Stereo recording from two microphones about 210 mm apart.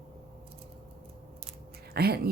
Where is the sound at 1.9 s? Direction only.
50° right (ahead or behind).